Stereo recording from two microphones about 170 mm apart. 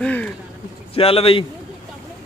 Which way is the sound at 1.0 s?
35° left (ahead or behind).